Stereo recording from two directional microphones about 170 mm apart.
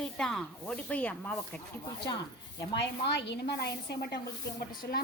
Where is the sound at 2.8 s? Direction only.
85° left.